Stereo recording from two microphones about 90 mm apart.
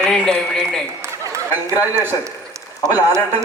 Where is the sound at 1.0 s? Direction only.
30° right (ahead or behind).